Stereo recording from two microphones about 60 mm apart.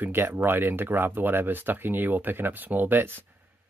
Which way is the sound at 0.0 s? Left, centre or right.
Right.